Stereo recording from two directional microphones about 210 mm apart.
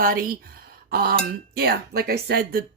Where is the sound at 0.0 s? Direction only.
40° right (ahead or behind).